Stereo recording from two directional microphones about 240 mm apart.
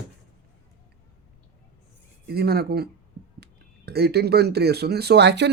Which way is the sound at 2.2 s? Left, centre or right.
Right.